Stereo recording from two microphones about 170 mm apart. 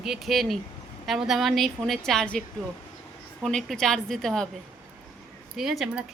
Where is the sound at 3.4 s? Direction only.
Centre (ahead or behind).